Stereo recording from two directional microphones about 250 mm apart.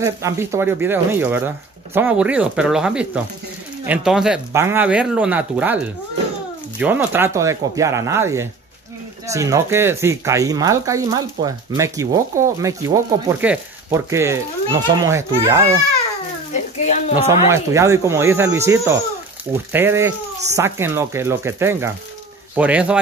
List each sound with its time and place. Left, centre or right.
0.0 s speech: centre
6.8 s speech: centre
16.5 s speech: left
17.3 s speech: centre